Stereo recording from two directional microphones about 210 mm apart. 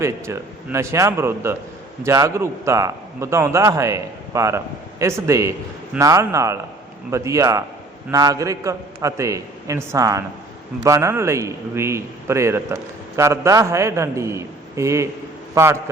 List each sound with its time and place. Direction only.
0.0 s a man's voice: 15° right (ahead or behind)